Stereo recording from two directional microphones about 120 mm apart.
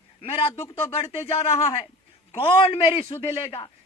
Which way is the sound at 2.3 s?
50° left (ahead or behind).